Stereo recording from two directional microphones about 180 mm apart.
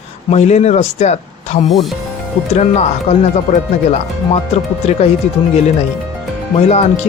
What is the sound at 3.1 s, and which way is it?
Speech, 35° left (ahead or behind).